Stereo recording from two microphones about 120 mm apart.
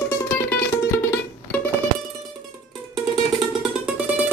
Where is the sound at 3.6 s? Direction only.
10° right (ahead or behind).